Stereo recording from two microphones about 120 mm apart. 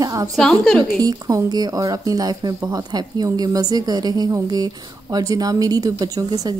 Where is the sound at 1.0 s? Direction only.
30° right (ahead or behind).